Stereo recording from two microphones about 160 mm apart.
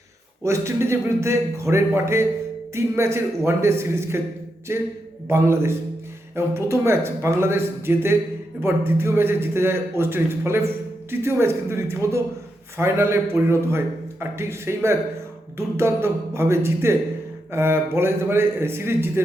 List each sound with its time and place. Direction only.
0.4 s a man's voice: 20° right (ahead or behind)